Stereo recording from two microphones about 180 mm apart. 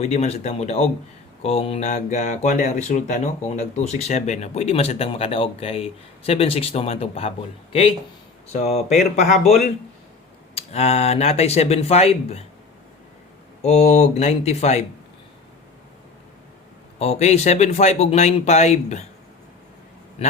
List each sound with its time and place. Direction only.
0.0 s speech: 35° left (ahead or behind)
10.5 s speech: 35° left (ahead or behind)
13.6 s speech: 40° left (ahead or behind)
17.0 s speech: 35° left (ahead or behind)
20.2 s a man's voice: 35° left (ahead or behind)